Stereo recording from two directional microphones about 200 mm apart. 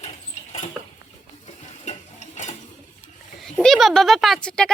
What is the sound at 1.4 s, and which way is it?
Stir, 35° left (ahead or behind).